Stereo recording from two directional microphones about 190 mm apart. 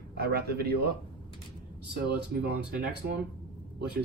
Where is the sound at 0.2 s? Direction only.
55° right (ahead or behind).